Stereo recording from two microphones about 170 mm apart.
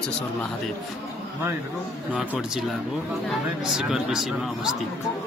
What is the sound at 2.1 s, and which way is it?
Speech, 5° right (ahead or behind).